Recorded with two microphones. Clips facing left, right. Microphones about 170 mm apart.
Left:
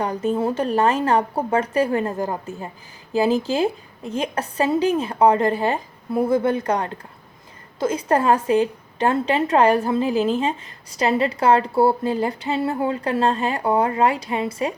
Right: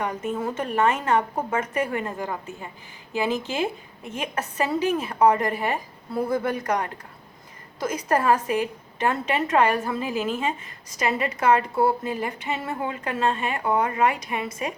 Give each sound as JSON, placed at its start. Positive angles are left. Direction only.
{"t": 0.0, "sound": "a woman's voice", "side_deg": 35}